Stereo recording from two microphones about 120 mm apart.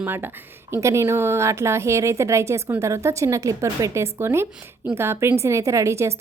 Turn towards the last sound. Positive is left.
turn(degrees=-25)  # may be behind; listen again after turning